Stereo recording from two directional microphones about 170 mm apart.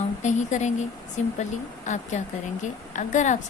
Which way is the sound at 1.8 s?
45° left (ahead or behind).